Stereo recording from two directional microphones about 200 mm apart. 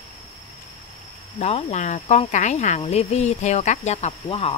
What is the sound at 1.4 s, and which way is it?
Speech, 35° left (ahead or behind).